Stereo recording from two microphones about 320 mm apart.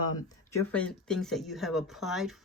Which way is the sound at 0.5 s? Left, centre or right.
Centre.